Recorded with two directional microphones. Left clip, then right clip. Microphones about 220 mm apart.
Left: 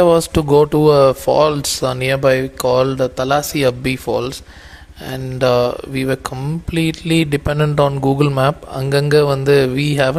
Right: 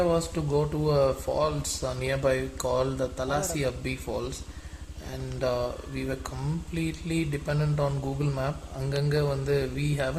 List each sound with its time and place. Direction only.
0.0 s speech: 50° left (ahead or behind)